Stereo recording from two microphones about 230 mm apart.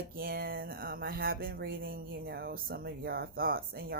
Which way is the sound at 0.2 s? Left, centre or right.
Right.